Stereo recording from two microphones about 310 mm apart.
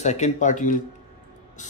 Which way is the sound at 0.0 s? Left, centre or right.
Left.